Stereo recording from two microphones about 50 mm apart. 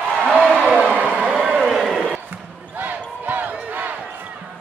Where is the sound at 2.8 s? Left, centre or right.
Right.